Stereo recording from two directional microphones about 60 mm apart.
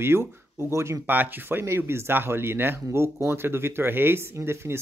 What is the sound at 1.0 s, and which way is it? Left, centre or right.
Speech, right.